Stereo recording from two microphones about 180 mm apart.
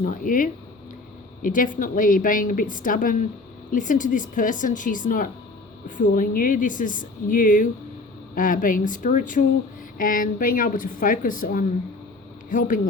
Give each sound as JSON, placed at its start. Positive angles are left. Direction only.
{"t": 0.0, "sound": "a woman's voice", "side_deg": 45}